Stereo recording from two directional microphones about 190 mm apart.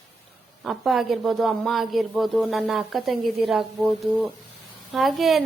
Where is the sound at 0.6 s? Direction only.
Centre (ahead or behind).